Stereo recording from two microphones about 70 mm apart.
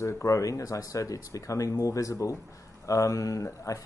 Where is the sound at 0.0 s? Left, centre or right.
Left.